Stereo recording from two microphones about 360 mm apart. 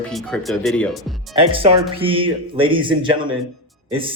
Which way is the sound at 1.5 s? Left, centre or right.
Centre.